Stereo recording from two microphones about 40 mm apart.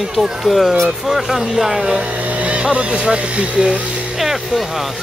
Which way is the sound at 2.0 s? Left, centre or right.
Right.